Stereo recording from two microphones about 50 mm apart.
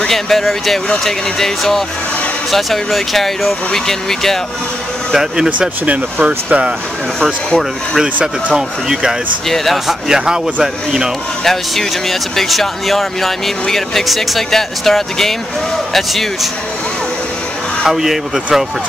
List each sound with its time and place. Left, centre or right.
0.1 s speech: centre
5.1 s speech: centre
6.2 s speech: right
7.2 s speech: centre
8.5 s speech: centre
9.5 s speech: centre
10.0 s speech: centre
11.4 s speech: centre
17.8 s speech: centre